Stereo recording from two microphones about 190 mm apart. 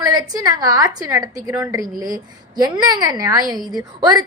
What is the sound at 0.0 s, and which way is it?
A woman's voice, 20° right (ahead or behind).